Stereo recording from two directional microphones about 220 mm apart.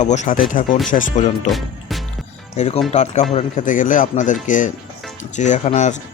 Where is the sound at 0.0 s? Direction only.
35° left (ahead or behind).